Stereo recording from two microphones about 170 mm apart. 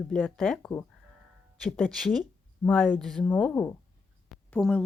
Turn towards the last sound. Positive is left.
turn(degrees=5)  # may be behind; listen again after turning